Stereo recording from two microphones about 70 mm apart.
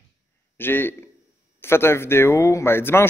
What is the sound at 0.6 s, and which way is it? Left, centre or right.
A man's voice, left.